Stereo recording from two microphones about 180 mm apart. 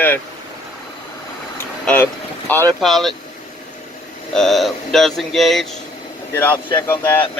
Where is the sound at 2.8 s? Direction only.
Centre (ahead or behind).